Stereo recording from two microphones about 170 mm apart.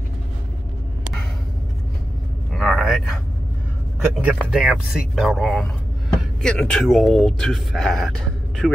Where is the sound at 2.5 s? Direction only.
Centre (ahead or behind).